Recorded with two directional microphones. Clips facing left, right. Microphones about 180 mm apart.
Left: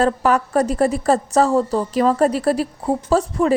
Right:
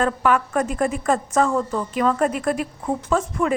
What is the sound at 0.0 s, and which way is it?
A woman's voice, 35° left (ahead or behind).